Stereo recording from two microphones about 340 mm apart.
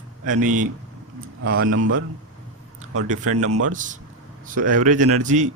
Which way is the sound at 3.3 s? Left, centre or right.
Right.